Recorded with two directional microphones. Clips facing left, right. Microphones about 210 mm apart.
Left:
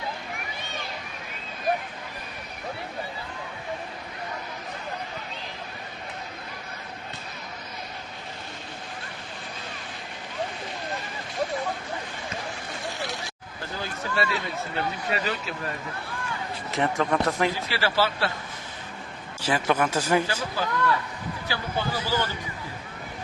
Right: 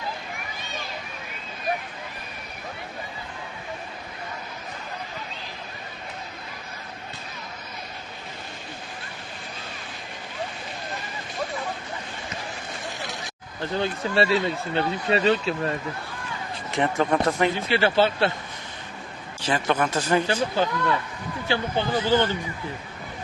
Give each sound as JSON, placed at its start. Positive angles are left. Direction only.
{"t": 13.0, "sound": "a sound", "side_deg": -20}
{"t": 14.8, "sound": "speech", "side_deg": -30}
{"t": 16.7, "sound": "speech", "side_deg": 0}
{"t": 17.5, "sound": "speech", "side_deg": -25}
{"t": 19.4, "sound": "speech", "side_deg": 10}
{"t": 20.2, "sound": "speech", "side_deg": -25}